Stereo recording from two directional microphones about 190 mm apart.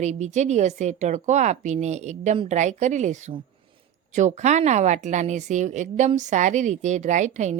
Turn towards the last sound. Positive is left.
turn(degrees=-40)  # may be behind; listen again after turning